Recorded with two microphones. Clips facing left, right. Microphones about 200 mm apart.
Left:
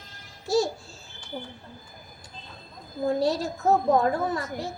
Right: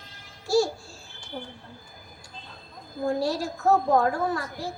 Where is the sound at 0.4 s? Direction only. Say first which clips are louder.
Right 1 dB; 20° left (ahead or behind).